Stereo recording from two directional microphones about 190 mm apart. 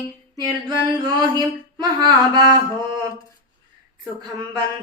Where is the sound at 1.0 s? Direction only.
20° right (ahead or behind).